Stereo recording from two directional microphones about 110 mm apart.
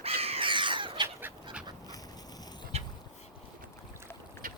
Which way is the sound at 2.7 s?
70° right (ahead or behind).